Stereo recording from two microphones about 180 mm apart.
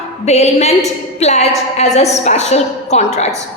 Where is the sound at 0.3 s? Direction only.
35° left (ahead or behind).